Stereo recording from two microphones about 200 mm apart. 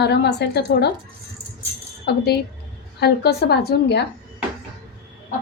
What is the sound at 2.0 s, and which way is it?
A woman's voice, 55° left (ahead or behind).